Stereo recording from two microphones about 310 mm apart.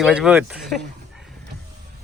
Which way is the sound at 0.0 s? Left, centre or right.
Centre.